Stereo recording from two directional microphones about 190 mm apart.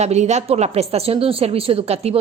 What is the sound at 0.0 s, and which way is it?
Speech, 35° right (ahead or behind).